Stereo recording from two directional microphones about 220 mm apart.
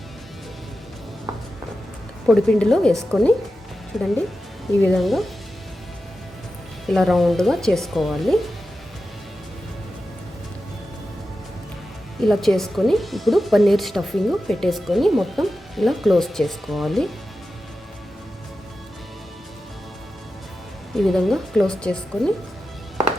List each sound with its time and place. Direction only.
2.2 s speech: centre (ahead or behind)
6.8 s speech: centre (ahead or behind)
12.2 s speech: centre (ahead or behind)
20.9 s speech: centre (ahead or behind)